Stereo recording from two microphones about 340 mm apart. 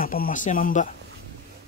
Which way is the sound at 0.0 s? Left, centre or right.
Left.